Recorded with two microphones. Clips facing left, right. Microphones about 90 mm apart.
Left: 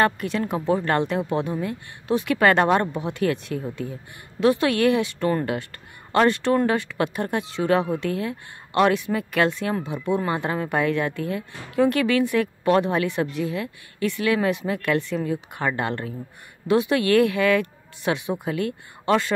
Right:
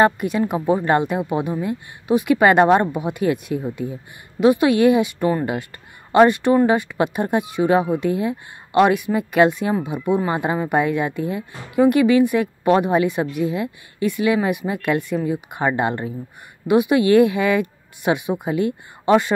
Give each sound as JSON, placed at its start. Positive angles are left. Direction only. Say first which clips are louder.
{"t": 0.0, "sound": "speech", "louder": "right 5 dB", "side_deg": -15}